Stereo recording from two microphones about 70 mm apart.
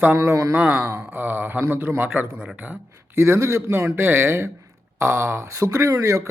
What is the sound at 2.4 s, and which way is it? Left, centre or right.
Speech, centre.